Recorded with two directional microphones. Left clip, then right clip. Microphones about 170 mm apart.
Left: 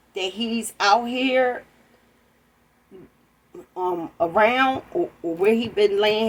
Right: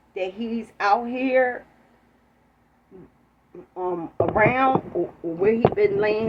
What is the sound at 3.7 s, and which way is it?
A woman's voice, 20° left (ahead or behind).